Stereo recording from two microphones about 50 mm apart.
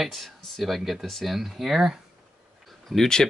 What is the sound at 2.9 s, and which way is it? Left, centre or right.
Speech, centre.